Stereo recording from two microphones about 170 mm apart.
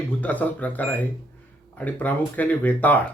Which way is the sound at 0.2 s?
10° left (ahead or behind).